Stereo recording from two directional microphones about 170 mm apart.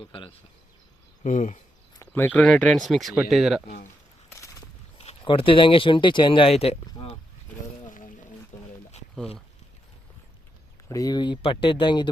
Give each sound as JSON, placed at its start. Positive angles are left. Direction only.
{"t": 0.0, "sound": "speech", "side_deg": 30}
{"t": 1.2, "sound": "speech", "side_deg": 45}
{"t": 2.0, "sound": "speech", "side_deg": 10}
{"t": 4.3, "sound": "a sound", "side_deg": 15}
{"t": 4.9, "sound": "speech", "side_deg": 35}
{"t": 7.9, "sound": "boat", "side_deg": 50}
{"t": 8.5, "sound": "a sound", "side_deg": 45}
{"t": 10.8, "sound": "speech", "side_deg": 20}